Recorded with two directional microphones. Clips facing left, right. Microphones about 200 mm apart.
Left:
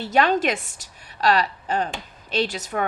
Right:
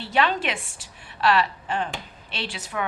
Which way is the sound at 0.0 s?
45° left (ahead or behind).